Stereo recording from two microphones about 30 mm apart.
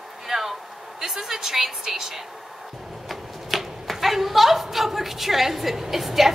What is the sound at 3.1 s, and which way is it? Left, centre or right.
Typewriter, centre.